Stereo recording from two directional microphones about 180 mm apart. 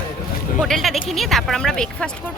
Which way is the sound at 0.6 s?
Centre (ahead or behind).